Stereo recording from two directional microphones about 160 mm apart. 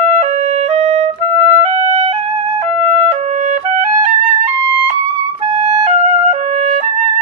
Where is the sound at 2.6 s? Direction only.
45° right (ahead or behind).